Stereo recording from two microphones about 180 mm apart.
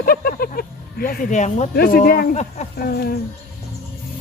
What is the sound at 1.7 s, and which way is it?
Speech, 55° left (ahead or behind).